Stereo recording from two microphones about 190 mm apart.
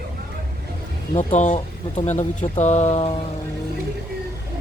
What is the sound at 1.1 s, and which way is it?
Speech, 40° left (ahead or behind).